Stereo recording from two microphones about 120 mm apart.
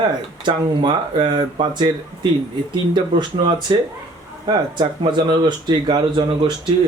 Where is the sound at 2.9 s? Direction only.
40° right (ahead or behind).